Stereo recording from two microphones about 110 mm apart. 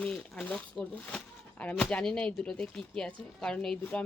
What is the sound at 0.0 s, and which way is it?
Speech, 5° left (ahead or behind).